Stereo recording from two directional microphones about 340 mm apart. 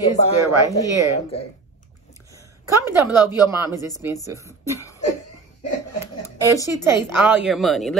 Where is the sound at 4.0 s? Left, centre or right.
Centre.